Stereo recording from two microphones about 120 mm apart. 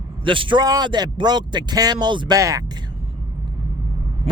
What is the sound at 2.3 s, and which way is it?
Speech, 30° right (ahead or behind).